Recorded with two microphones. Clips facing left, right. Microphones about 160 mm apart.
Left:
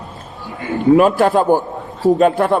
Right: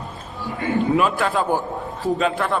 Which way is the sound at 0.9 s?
45° left (ahead or behind).